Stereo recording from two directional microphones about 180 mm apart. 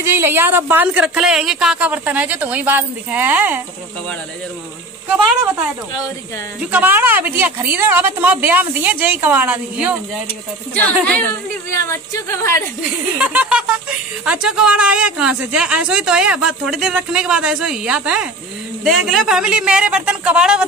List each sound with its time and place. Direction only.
0.0 s speech: 15° right (ahead or behind)
5.0 s speech: 10° right (ahead or behind)
6.6 s speech: 10° right (ahead or behind)
10.7 s speech: 10° left (ahead or behind)
11.7 s speech: 15° left (ahead or behind)
13.2 s speech: 5° right (ahead or behind)